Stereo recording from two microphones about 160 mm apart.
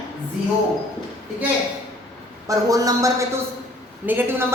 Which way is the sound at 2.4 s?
20° right (ahead or behind).